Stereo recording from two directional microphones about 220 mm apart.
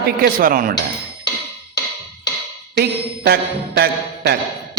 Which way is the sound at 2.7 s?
45° right (ahead or behind).